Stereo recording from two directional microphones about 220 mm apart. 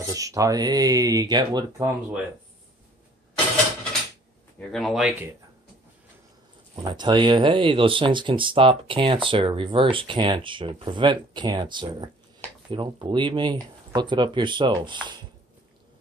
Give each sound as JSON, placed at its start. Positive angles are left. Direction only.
{"t": 0.0, "sound": "speech", "side_deg": -15}
{"t": 4.6, "sound": "speech", "side_deg": 0}
{"t": 6.7, "sound": "speech", "side_deg": -20}